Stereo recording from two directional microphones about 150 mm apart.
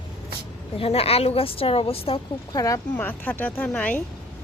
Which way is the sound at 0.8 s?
40° left (ahead or behind).